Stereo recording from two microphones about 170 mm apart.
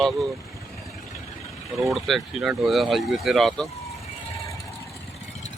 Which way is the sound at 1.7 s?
Centre (ahead or behind).